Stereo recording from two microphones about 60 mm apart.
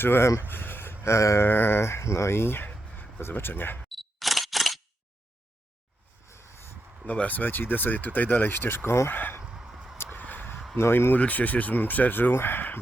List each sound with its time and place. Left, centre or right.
0.0 s speech: left
1.5 s speech: left
3.8 s camera: centre
6.2 s vehicle: left
7.1 s speech: left
9.4 s a sound: centre
10.0 s a sound: left
10.8 s speech: left
11.2 s speech: left
12.3 s speech: left